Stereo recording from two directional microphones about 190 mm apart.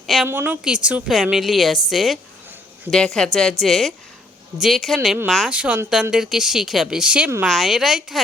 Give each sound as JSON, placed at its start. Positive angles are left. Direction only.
{"t": 0.3, "sound": "speech", "side_deg": -10}